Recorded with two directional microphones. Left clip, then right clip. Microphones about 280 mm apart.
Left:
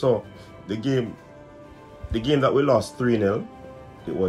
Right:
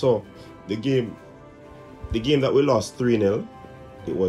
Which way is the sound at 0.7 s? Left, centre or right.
Centre.